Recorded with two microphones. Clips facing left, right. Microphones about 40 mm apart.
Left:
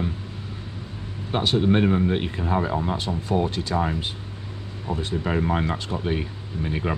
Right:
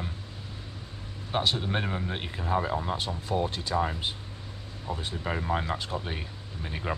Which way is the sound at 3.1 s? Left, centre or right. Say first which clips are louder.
Left 5 dB; left.